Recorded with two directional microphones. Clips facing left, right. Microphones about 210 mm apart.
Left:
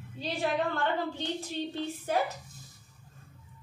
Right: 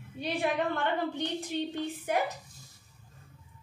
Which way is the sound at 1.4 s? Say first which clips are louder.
Right 1 dB; 15° right (ahead or behind).